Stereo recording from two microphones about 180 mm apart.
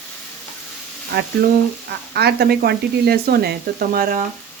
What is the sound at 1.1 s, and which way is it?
Speech, 65° right (ahead or behind).